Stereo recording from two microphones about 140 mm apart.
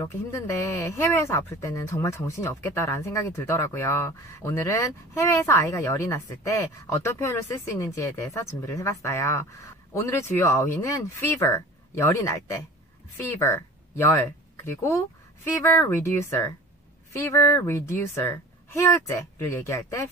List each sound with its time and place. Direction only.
0.0 s speech: 20° left (ahead or behind)